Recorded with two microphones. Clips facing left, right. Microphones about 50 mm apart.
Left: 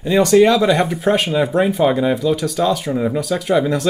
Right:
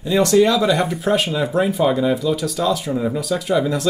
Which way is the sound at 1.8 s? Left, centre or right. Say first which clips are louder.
Left 2 dB; centre.